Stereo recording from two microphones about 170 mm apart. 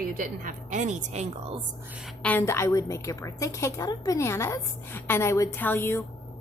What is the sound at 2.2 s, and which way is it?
A woman's voice, 15° left (ahead or behind).